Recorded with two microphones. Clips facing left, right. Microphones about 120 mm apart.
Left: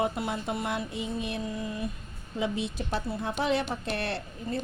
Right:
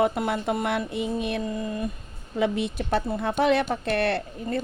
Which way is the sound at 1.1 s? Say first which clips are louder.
Right 5 dB; 55° right (ahead or behind).